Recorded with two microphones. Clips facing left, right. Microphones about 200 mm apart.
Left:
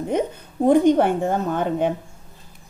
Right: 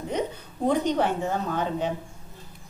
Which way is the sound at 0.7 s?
50° left (ahead or behind).